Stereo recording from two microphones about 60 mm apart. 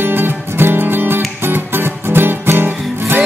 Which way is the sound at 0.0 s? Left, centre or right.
Right.